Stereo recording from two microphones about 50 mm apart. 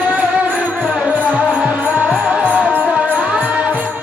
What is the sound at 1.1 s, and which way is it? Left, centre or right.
Music, right.